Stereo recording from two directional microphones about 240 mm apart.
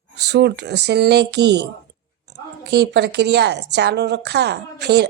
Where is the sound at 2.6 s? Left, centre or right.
Right.